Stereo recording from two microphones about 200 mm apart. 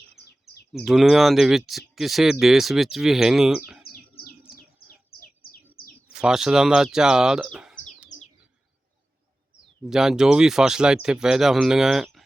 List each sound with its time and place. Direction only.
0.7 s speech: centre (ahead or behind)
4.5 s bird: 45° left (ahead or behind)
6.1 s speech: 5° right (ahead or behind)
9.9 s speech: centre (ahead or behind)